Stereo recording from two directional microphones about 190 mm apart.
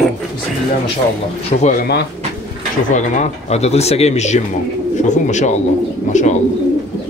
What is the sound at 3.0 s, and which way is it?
Speech, 35° left (ahead or behind).